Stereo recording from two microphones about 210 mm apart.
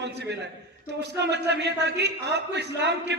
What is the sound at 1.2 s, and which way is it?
A man's voice, 55° right (ahead or behind).